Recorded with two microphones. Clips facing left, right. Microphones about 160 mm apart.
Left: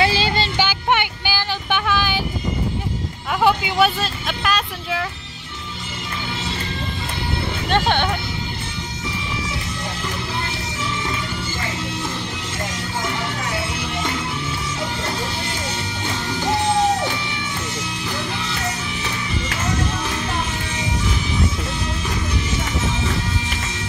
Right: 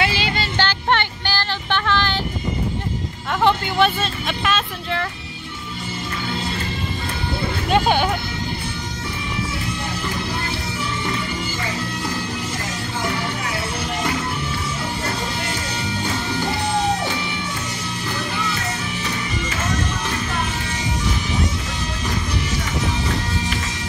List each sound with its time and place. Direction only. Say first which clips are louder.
0.0 s music: left 3 dB; 30° left (ahead or behind)
0.6 s a sound: right 2 dB; 10° left (ahead or behind)
3.4 s speech: even; 5° left (ahead or behind)
7.7 s music: right 2 dB; 5° right (ahead or behind)